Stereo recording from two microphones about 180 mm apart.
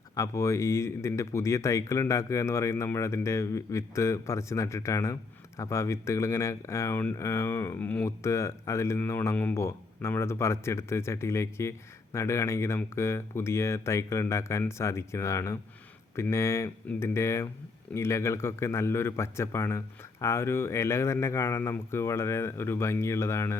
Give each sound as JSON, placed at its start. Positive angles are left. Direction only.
{"t": 0.2, "sound": "speech", "side_deg": 15}